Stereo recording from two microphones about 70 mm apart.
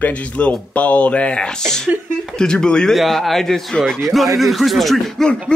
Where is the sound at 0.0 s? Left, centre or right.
Centre.